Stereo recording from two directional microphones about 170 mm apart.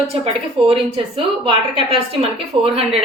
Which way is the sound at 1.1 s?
30° right (ahead or behind).